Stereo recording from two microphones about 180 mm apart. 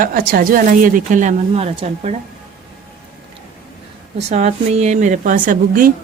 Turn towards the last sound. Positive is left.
turn(degrees=-50)  # may be behind; listen again after turning